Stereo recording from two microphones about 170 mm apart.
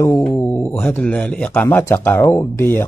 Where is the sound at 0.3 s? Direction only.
15° left (ahead or behind).